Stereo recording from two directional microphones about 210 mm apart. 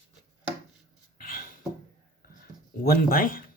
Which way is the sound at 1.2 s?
40° left (ahead or behind).